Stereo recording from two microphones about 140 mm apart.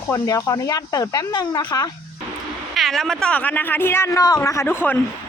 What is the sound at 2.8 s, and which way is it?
Speech, centre (ahead or behind).